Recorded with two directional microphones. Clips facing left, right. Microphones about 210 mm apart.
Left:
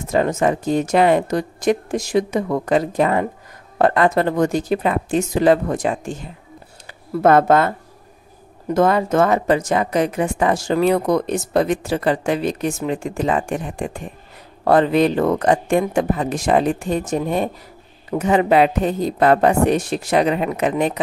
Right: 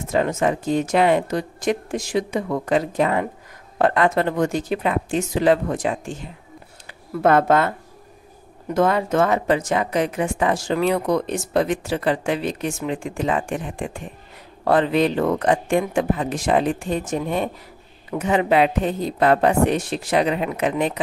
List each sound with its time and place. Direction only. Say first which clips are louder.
0.1 s a woman's voice: left 3 dB; 40° left (ahead or behind)
8.7 s a woman's voice: left 3 dB; 40° left (ahead or behind)